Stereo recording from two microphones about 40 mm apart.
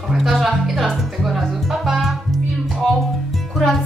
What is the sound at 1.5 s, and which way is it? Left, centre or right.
Music, centre.